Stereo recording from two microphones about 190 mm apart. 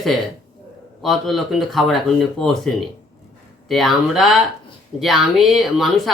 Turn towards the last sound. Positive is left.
turn(degrees=0)  # may be behind; listen again after turning